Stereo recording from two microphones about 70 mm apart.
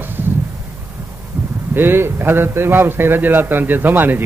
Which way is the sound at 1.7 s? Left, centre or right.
Right.